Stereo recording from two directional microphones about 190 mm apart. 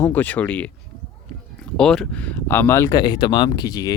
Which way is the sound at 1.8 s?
5° left (ahead or behind).